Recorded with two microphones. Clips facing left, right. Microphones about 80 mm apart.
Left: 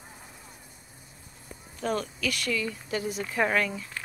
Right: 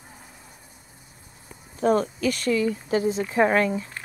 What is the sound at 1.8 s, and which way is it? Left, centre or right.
Speech, right.